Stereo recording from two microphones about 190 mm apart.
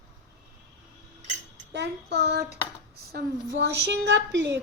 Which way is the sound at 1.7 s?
65° right (ahead or behind).